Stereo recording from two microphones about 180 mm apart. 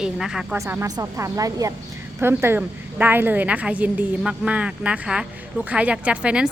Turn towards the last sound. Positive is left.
turn(degrees=-5)  # may be behind; listen again after turning